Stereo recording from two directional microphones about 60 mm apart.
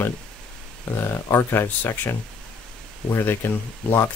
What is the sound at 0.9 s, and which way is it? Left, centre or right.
Speech, left.